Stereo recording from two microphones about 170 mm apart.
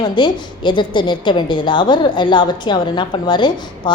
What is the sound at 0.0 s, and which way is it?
A woman's voice, 25° left (ahead or behind).